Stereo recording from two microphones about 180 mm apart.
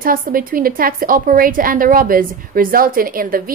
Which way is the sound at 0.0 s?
50° right (ahead or behind).